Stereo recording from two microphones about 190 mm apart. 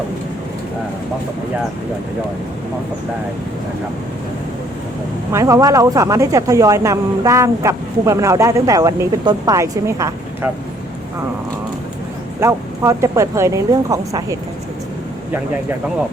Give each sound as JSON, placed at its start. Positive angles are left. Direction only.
{"t": 5.3, "sound": "speech", "side_deg": -15}
{"t": 12.4, "sound": "speech", "side_deg": -15}